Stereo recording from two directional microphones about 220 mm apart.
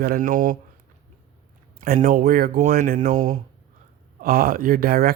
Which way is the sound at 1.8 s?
40° right (ahead or behind).